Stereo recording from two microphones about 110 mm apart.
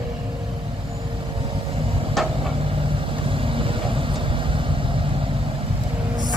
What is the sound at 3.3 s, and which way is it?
Vehicle, 55° right (ahead or behind).